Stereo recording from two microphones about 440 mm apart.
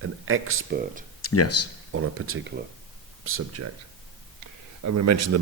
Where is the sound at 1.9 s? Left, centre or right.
Right.